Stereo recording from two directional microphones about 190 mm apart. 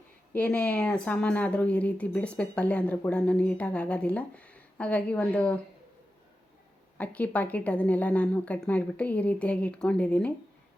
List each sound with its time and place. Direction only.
0.3 s speech: 10° left (ahead or behind)
7.0 s speech: 5° left (ahead or behind)